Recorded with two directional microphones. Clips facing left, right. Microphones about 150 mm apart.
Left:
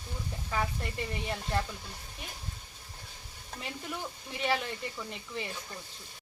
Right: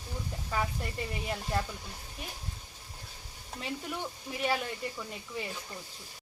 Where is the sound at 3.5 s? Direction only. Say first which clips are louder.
Right 2 dB; centre (ahead or behind).